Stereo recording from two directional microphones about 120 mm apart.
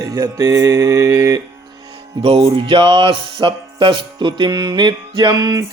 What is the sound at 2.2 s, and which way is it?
Music, 50° right (ahead or behind).